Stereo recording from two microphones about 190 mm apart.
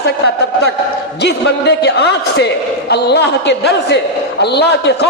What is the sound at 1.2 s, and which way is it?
A man's voice, 60° left (ahead or behind).